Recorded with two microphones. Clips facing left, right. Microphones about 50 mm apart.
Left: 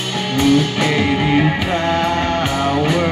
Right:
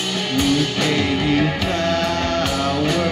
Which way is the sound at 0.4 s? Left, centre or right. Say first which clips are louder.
Left 5 dB; centre.